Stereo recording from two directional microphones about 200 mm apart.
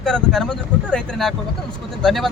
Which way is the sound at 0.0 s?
5° left (ahead or behind).